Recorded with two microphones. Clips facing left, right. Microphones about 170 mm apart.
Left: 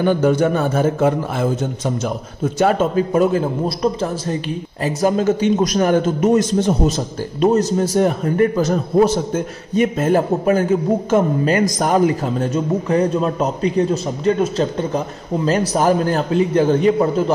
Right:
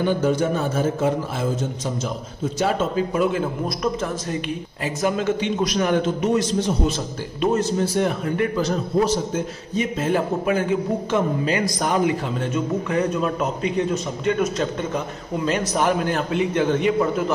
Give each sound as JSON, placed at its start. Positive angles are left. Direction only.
{"t": 0.0, "sound": "a man's voice", "side_deg": 60}
{"t": 2.6, "sound": "a man's voice", "side_deg": 50}